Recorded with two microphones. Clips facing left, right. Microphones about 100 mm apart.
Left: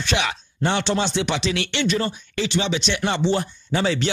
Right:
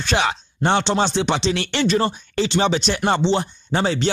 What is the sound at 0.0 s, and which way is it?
Speech, 35° right (ahead or behind).